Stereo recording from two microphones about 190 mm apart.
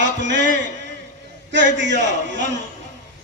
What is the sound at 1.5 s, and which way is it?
A man's voice, 70° right (ahead or behind).